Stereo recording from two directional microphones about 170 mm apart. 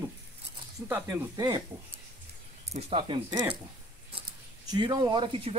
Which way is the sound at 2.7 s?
35° right (ahead or behind).